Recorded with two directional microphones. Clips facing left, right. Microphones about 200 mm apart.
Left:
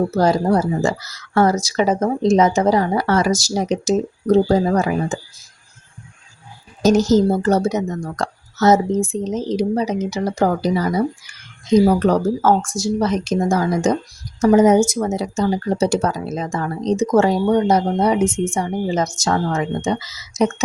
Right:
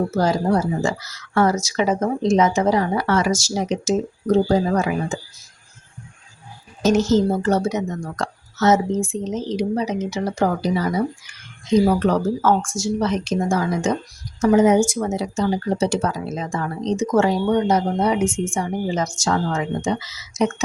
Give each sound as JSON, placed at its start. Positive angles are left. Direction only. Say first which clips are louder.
{"t": 0.2, "sound": "speech", "louder": "left 3 dB", "side_deg": 40}
{"t": 6.8, "sound": "speech", "louder": "left 3 dB", "side_deg": 40}